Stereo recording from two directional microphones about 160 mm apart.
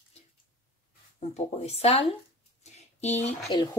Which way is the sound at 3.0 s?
45° left (ahead or behind).